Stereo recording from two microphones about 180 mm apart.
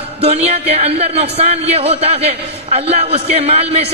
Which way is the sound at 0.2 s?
35° right (ahead or behind).